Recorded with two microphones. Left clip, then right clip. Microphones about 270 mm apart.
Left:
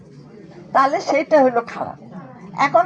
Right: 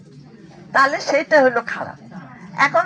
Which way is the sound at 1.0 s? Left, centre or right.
Right.